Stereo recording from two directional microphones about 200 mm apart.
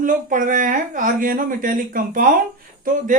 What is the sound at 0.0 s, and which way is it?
Speech, 40° right (ahead or behind).